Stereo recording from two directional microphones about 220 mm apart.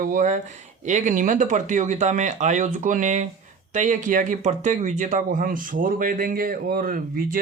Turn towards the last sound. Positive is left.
turn(degrees=-40)  # may be behind; listen again after turning